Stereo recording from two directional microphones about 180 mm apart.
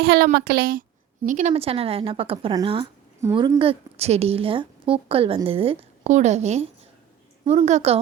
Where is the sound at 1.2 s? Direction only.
40° right (ahead or behind).